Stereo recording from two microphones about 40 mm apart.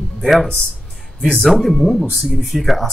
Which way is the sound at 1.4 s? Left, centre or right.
Centre.